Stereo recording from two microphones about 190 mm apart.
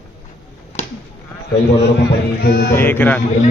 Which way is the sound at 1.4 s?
55° left (ahead or behind).